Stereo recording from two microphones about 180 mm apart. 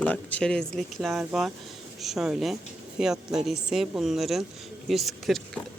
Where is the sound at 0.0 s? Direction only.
5° left (ahead or behind).